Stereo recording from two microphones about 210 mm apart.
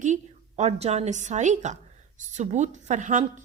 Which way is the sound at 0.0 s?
35° right (ahead or behind).